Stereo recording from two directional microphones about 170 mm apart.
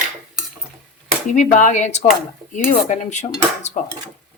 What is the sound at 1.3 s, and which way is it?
Dishes, 45° left (ahead or behind).